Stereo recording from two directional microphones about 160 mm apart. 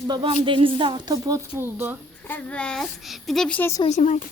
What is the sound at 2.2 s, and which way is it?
A woman's voice, 10° left (ahead or behind).